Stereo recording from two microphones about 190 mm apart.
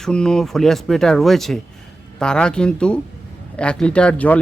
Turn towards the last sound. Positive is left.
turn(degrees=5)  # may be behind; listen again after turning